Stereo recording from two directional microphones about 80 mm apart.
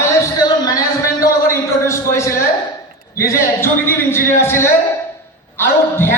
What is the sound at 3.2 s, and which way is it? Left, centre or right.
A man's voice, left.